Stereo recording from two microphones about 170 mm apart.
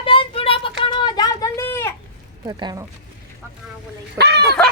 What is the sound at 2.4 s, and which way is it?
Speech, 25° right (ahead or behind).